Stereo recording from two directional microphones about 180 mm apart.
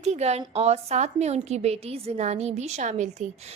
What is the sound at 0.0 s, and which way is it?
A woman's voice, 40° right (ahead or behind).